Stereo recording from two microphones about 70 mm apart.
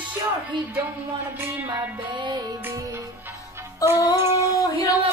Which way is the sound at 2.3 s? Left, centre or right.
Right.